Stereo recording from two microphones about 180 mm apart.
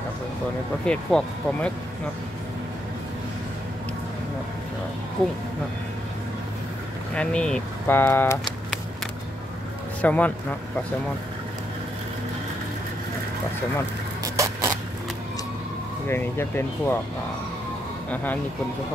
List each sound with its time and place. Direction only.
0.8 s speech: 5° left (ahead or behind)
7.2 s speech: 5° left (ahead or behind)
10.0 s speech: 10° left (ahead or behind)
14.2 s a sound: 15° right (ahead or behind)
16.1 s speech: 15° left (ahead or behind)
18.1 s speech: 10° left (ahead or behind)